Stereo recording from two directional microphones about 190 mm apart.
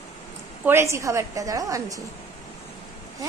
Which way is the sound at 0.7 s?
15° right (ahead or behind).